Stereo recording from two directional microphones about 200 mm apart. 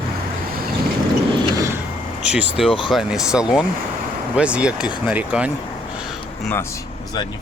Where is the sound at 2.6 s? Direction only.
Centre (ahead or behind).